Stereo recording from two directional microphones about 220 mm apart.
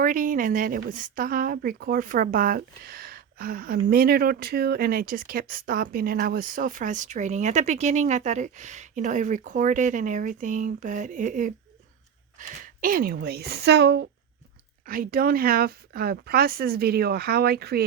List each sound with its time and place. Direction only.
0.0 s speech: 40° right (ahead or behind)